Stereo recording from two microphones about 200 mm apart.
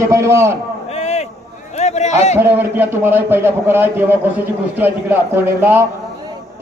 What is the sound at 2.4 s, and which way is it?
A man's voice, 10° right (ahead or behind).